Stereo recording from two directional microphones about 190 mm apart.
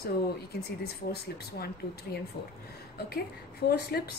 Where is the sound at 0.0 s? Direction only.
55° left (ahead or behind).